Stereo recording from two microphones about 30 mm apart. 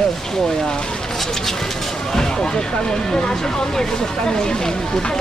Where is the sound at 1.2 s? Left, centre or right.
Centre.